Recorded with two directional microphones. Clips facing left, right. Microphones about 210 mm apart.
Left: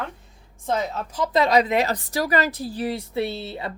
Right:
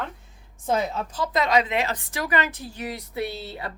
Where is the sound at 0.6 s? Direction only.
10° right (ahead or behind).